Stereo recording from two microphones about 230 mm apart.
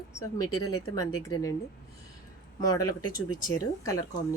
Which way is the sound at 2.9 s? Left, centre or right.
Left.